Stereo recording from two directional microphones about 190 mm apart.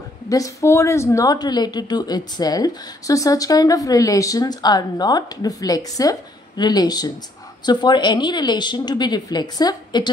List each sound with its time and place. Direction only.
0.3 s speech: 15° left (ahead or behind)